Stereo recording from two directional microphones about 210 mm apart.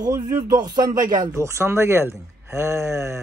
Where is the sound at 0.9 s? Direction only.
40° right (ahead or behind).